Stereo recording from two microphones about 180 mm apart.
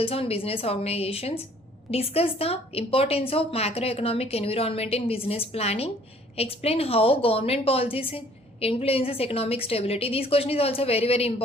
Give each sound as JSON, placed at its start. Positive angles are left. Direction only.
{"t": 0.0, "sound": "a woman's voice", "side_deg": 30}